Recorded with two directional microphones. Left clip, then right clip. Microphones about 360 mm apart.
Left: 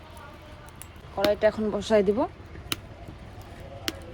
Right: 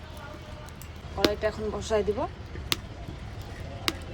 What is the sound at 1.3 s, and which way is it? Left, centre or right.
Speech, centre.